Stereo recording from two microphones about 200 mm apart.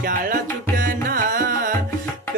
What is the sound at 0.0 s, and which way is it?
Music, 45° right (ahead or behind).